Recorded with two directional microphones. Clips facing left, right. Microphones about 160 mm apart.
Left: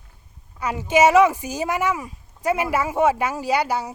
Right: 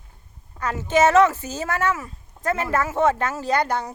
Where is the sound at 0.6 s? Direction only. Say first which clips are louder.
Left 2 dB; 10° left (ahead or behind).